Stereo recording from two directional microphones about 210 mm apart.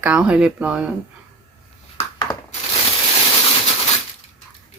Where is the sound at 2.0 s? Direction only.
20° left (ahead or behind).